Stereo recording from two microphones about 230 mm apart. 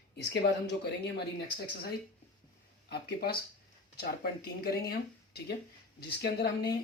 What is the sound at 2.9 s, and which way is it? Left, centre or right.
Speech, left.